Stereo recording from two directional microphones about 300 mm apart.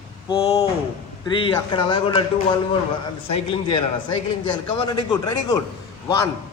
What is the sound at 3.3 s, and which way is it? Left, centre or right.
A man's voice, centre.